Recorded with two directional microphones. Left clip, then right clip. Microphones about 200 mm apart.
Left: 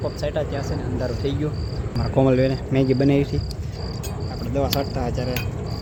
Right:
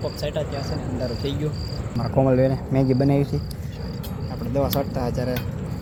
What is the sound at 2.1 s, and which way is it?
Speech, 20° left (ahead or behind).